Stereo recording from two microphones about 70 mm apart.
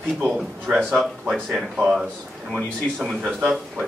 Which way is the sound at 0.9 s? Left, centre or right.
Centre.